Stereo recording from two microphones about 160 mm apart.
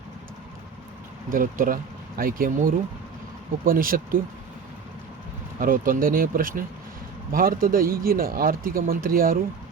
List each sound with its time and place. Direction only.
1.3 s speech: 60° right (ahead or behind)
5.5 s speech: 60° right (ahead or behind)